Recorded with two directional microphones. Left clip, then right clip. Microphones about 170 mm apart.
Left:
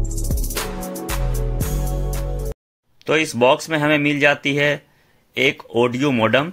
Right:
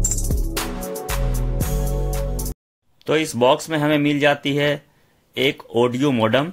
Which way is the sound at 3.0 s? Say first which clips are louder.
Left 1 dB; 5° right (ahead or behind).